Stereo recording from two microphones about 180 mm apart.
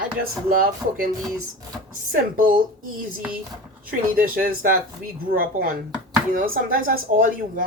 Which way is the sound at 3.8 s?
55° right (ahead or behind).